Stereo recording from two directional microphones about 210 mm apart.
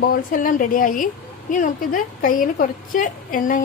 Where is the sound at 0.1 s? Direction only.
40° left (ahead or behind).